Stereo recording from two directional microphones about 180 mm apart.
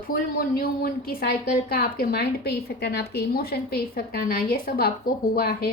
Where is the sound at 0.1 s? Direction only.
55° left (ahead or behind).